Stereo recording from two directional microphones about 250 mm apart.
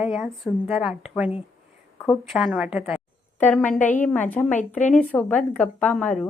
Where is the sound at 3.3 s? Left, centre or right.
Centre.